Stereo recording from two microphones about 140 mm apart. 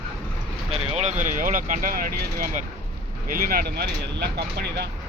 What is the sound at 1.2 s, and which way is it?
Speech, 70° right (ahead or behind).